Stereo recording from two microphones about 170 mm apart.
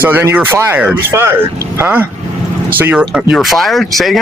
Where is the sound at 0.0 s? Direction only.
10° right (ahead or behind).